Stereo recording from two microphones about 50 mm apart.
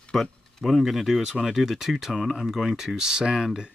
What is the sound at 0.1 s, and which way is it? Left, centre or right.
Speech, centre.